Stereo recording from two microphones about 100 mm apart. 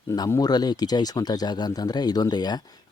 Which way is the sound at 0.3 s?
40° left (ahead or behind).